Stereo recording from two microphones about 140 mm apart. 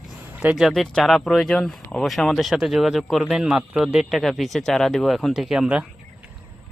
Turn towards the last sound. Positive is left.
turn(degrees=-5)  # may be behind; listen again after turning